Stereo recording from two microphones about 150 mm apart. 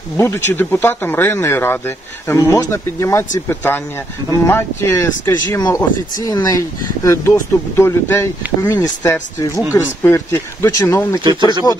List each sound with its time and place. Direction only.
0.2 s speech: 15° left (ahead or behind)